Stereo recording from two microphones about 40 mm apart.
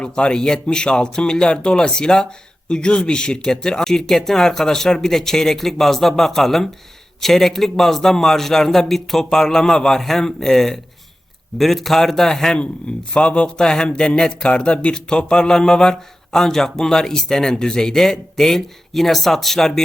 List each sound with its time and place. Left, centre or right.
0.0 s a man's voice: left
13.1 s a man's voice: left; by 19.8 s centre